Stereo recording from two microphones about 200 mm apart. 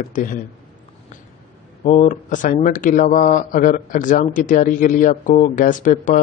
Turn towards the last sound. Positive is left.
turn(degrees=40)  # may be behind; listen again after turning